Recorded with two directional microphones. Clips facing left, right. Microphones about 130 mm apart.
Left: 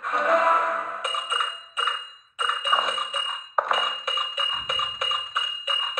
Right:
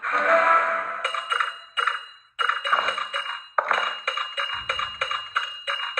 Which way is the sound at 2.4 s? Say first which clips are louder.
Even; 5° left (ahead or behind).